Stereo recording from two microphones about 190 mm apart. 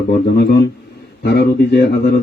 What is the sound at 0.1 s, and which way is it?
Speech, 55° left (ahead or behind).